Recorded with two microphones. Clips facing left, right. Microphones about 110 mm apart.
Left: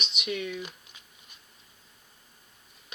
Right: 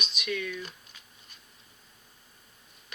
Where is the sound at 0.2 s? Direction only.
20° left (ahead or behind).